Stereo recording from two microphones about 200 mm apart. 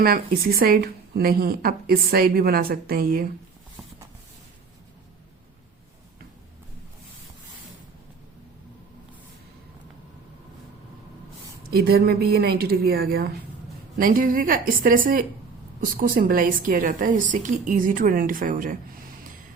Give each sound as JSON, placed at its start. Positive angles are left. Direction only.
{"t": 0.0, "sound": "speech", "side_deg": -50}
{"t": 11.7, "sound": "speech", "side_deg": -50}